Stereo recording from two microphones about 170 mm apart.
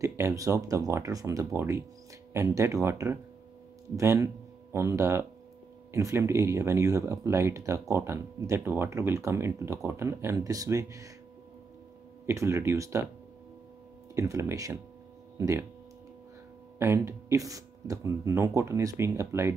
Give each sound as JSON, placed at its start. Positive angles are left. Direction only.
{"t": 0.0, "sound": "speech", "side_deg": -15}
{"t": 12.3, "sound": "speech", "side_deg": -15}
{"t": 14.1, "sound": "speech", "side_deg": -15}
{"t": 16.7, "sound": "speech", "side_deg": -15}